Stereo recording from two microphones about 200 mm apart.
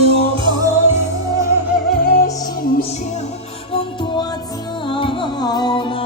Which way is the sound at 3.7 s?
20° left (ahead or behind).